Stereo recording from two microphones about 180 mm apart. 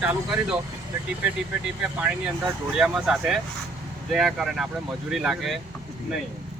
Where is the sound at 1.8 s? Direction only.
10° right (ahead or behind).